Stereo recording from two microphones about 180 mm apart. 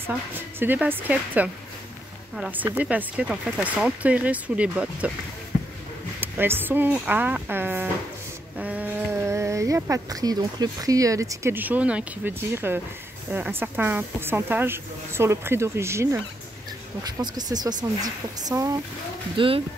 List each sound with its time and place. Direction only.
0.0 s speech: 10° right (ahead or behind)
6.2 s speech: 10° right (ahead or behind)
17.4 s speech: 20° right (ahead or behind)